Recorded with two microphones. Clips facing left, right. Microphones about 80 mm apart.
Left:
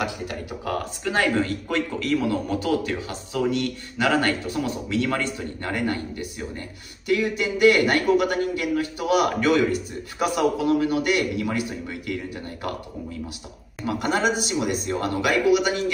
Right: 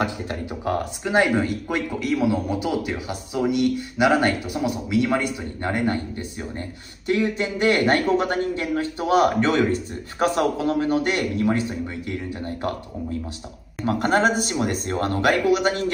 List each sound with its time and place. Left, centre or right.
0.0 s a man's voice: right
13.8 s speech: right